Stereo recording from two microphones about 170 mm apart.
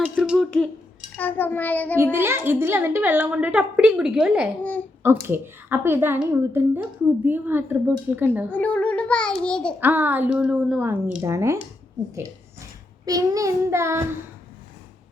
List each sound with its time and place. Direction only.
0.0 s a sound: 5° right (ahead or behind)
1.1 s a child's voice: 10° left (ahead or behind)
2.1 s a woman's voice: 15° right (ahead or behind)
4.6 s a child's voice: 10° left (ahead or behind)
5.0 s a woman's voice: 15° right (ahead or behind)
8.4 s a child's voice: 10° left (ahead or behind)
9.8 s a woman's voice: 10° right (ahead or behind)
12.1 s a sound: 15° right (ahead or behind)
13.1 s a woman's voice: 20° right (ahead or behind)